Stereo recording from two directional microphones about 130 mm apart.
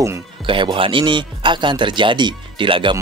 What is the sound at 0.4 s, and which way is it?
Speech, 40° right (ahead or behind).